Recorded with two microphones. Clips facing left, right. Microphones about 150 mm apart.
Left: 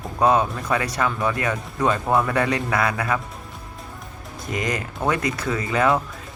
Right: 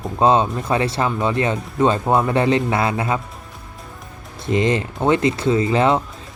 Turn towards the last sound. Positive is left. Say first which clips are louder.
# right 4 dB
turn(degrees=-25)  # may be behind; listen again after turning